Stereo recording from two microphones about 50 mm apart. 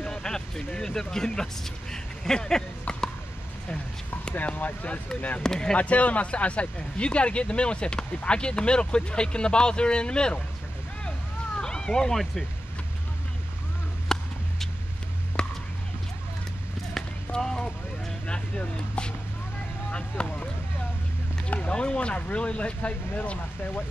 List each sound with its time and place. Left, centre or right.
0.0 s speech: centre
4.4 s speech: left
5.4 s speech: centre
5.8 s speech: left
11.1 s a sound: centre
14.1 s a sound: centre
15.4 s whispering: centre
17.3 s a sound: centre
19.9 s speech: left
21.5 s speech: left